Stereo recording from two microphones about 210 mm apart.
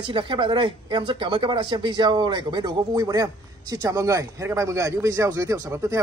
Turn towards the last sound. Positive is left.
turn(degrees=-15)  # may be behind; listen again after turning